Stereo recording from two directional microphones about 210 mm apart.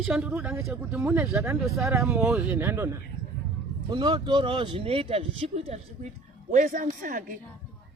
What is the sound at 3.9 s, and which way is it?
Speech, 20° right (ahead or behind).